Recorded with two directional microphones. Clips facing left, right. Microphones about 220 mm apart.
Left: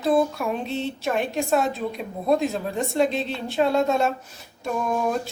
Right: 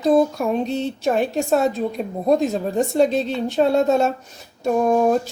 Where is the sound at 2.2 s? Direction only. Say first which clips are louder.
Right 3 dB; 40° right (ahead or behind).